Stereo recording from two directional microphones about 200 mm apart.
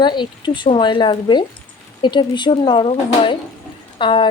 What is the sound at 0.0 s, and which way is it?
Speech, 25° left (ahead or behind).